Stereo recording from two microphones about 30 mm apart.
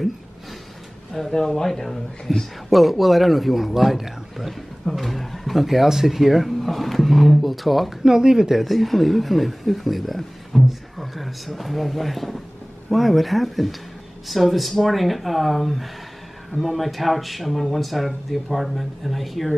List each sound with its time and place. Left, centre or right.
1.3 s speech: centre
2.7 s a man's voice: centre
8.0 s speech: right
8.5 s a man's voice: centre